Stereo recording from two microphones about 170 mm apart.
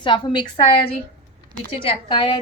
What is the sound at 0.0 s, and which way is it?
A woman's voice, 30° left (ahead or behind).